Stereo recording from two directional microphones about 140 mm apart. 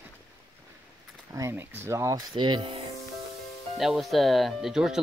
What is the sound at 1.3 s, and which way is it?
Speech, 20° right (ahead or behind).